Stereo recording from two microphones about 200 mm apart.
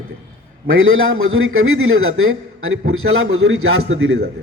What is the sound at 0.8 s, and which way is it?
A man's voice, 85° right.